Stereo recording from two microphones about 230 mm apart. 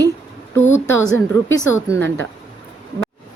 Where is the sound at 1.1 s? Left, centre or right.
Centre.